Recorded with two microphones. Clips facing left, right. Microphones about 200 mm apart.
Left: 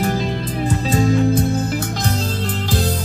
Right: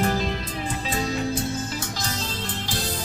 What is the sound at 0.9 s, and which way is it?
Music, 50° left (ahead or behind).